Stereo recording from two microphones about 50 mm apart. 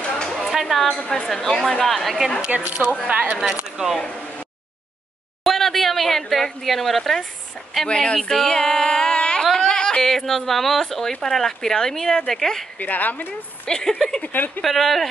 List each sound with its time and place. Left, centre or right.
0.5 s a sound: centre
0.8 s speech: centre
2.5 s speech: right
3.8 s speech: centre
5.4 s speech: centre
7.9 s speech: centre
8.2 s a sound: centre
9.7 s speech: centre
12.7 s speech: left
13.7 s speech: centre
14.2 s speech: left
14.6 s speech: centre